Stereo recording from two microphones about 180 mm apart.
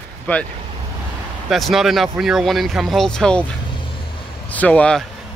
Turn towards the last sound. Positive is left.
turn(degrees=5)  # may be behind; listen again after turning